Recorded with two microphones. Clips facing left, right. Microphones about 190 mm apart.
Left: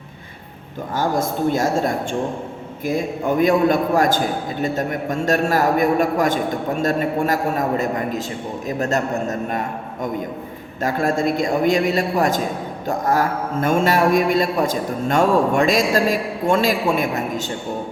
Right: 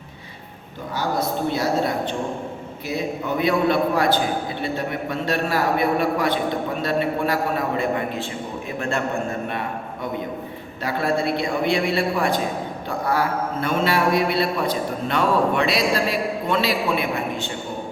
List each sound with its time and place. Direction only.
0.9 s a man's voice: 50° left (ahead or behind)